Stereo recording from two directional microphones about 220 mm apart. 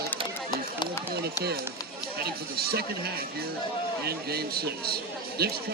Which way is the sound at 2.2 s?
45° right (ahead or behind).